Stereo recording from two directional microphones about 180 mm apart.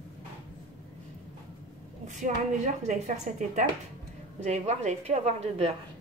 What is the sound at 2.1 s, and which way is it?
Speech, 40° right (ahead or behind).